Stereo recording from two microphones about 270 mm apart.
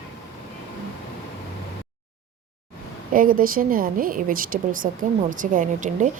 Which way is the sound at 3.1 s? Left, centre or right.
Right.